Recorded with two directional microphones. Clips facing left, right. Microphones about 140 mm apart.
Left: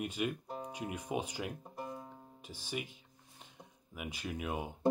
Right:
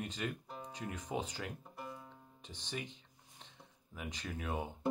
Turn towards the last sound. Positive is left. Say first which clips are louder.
# left 2 dB
turn(degrees=10)  # may be behind; listen again after turning